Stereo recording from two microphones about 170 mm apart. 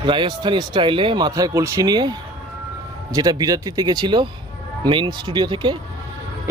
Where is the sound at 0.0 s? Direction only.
30° right (ahead or behind).